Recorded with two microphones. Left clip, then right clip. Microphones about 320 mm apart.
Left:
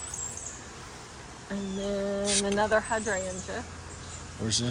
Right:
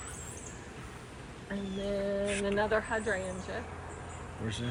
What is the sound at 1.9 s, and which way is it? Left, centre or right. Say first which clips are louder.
Speech: left 2 dB; left.